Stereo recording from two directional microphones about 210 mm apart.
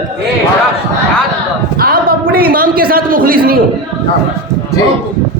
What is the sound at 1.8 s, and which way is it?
A man's voice, 45° right (ahead or behind).